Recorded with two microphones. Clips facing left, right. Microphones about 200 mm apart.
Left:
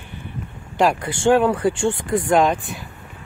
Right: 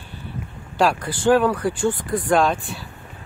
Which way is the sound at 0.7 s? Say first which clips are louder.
Left 1 dB; 20° left (ahead or behind).